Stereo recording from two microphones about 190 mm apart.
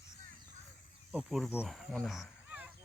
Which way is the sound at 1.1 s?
Centre (ahead or behind).